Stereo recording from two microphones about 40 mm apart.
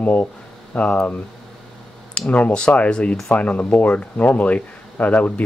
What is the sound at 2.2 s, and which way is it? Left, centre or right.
Speech, left.